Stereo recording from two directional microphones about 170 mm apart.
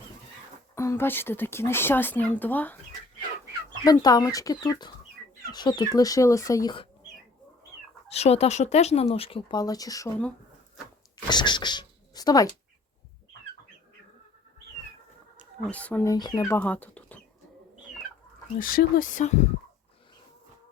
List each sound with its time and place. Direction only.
0.8 s speech: 15° left (ahead or behind)
3.8 s speech: 20° left (ahead or behind)
8.1 s speech: 40° left (ahead or behind); by 10.1 s 20° left (ahead or behind)
11.3 s speech: 25° left (ahead or behind)
15.7 s speech: 10° left (ahead or behind)
16.0 s speech: 25° left (ahead or behind)
18.5 s speech: 55° left (ahead or behind)